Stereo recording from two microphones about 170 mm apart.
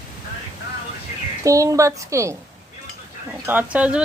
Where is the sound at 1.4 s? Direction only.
20° right (ahead or behind).